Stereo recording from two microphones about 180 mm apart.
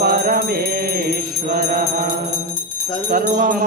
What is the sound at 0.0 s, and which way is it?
Music, 55° right (ahead or behind).